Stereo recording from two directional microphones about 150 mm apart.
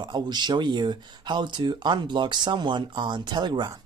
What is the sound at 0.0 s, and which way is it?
Speech, 30° right (ahead or behind).